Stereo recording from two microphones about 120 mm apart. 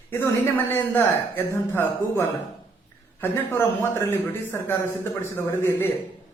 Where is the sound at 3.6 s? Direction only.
20° left (ahead or behind).